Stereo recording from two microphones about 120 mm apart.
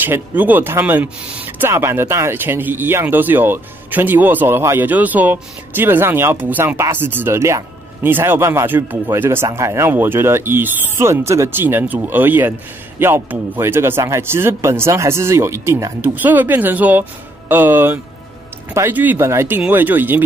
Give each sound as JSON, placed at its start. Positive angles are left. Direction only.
{"t": 0.0, "sound": "speech", "side_deg": -15}